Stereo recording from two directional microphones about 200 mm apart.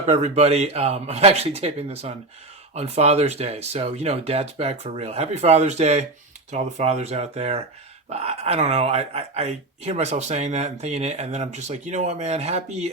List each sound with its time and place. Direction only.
0.1 s speech: 30° right (ahead or behind)